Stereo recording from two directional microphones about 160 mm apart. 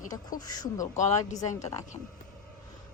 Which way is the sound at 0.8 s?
50° left (ahead or behind).